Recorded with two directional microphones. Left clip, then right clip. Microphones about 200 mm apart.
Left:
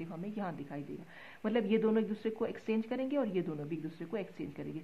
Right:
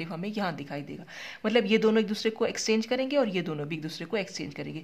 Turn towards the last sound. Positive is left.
turn(degrees=-35)  # may be behind; listen again after turning